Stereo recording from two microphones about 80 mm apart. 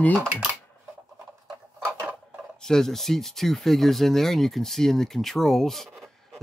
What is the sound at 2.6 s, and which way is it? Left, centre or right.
Speech, centre.